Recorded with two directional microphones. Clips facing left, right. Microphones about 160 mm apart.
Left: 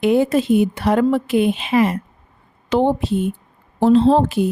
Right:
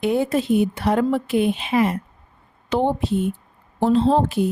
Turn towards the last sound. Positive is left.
turn(degrees=90)